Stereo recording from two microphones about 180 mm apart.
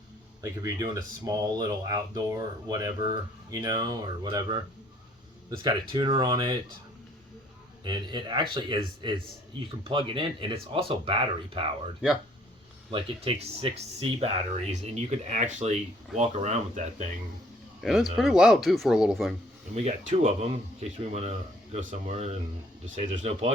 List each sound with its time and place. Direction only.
0.4 s speech: 20° right (ahead or behind)
7.9 s speech: 25° right (ahead or behind)
12.9 s speech: 30° right (ahead or behind)
15.3 s speech: 40° right (ahead or behind)
17.7 s speech: centre (ahead or behind)
19.7 s speech: 40° right (ahead or behind)